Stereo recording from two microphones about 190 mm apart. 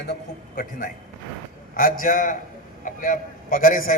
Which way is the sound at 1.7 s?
45° left (ahead or behind).